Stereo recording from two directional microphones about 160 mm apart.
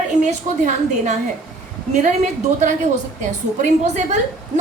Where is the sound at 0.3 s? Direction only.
50° right (ahead or behind).